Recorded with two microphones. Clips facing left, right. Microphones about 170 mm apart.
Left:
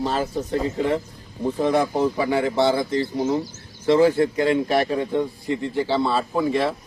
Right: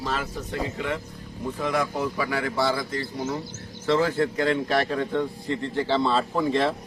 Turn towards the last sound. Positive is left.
turn(degrees=10)  # may be behind; listen again after turning